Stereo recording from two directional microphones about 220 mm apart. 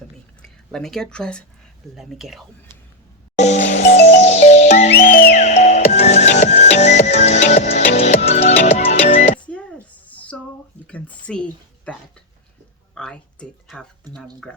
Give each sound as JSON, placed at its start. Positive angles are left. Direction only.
{"t": 0.4, "sound": "speech", "side_deg": 0}
{"t": 3.3, "sound": "music", "side_deg": 30}
{"t": 4.9, "sound": "music", "side_deg": 45}
{"t": 5.3, "sound": "music", "side_deg": 30}
{"t": 10.1, "sound": "a sound", "side_deg": 5}
{"t": 10.8, "sound": "speech", "side_deg": 5}